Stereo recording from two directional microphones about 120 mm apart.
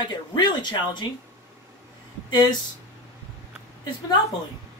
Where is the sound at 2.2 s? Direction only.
35° left (ahead or behind).